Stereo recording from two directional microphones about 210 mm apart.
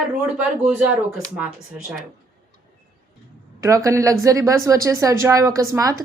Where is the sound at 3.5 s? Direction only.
15° right (ahead or behind).